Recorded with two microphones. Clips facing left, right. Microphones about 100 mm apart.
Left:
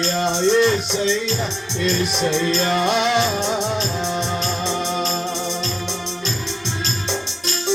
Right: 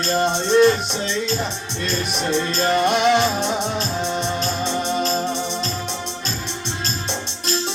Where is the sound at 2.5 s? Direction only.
45° right (ahead or behind).